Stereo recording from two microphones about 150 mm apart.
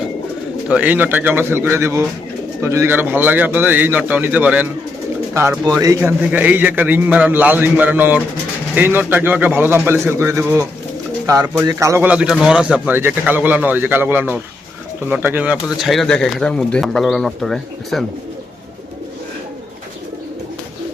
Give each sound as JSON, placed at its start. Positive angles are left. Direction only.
{"t": 0.7, "sound": "speech", "side_deg": -10}